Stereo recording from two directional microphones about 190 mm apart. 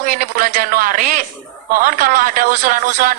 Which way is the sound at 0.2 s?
45° right (ahead or behind).